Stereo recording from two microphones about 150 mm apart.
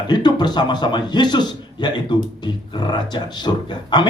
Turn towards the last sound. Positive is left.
turn(degrees=30)  # may be behind; listen again after turning